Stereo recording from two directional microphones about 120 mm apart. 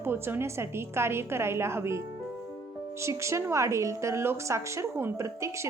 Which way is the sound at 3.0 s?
25° right (ahead or behind).